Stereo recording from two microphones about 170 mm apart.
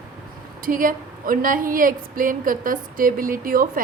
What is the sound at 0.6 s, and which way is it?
A woman's voice, 55° right (ahead or behind).